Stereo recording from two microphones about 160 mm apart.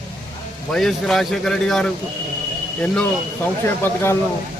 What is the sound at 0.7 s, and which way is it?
A man's voice, centre (ahead or behind).